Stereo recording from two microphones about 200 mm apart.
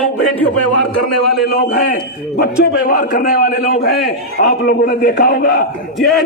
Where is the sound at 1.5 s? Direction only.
45° left (ahead or behind).